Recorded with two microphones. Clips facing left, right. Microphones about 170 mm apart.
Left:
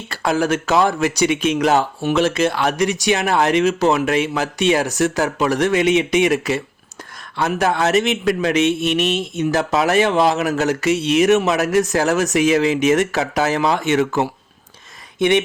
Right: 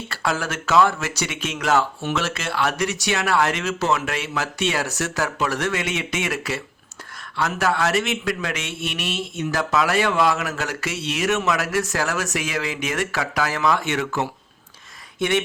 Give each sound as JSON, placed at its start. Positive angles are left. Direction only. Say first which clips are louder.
{"t": 0.3, "sound": "speech", "louder": "left 7 dB", "side_deg": 20}